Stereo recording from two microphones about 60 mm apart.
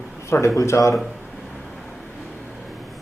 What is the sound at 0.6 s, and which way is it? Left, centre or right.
Speech, left.